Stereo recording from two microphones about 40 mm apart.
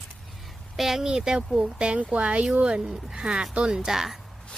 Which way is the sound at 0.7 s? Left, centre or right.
Centre.